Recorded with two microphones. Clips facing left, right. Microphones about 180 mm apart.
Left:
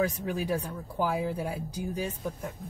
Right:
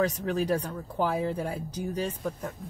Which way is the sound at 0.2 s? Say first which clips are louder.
Right 3 dB; 5° left (ahead or behind).